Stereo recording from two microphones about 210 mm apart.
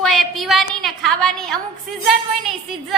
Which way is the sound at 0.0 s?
Centre (ahead or behind).